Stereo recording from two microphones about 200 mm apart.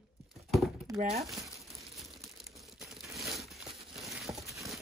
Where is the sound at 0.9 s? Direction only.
15° right (ahead or behind).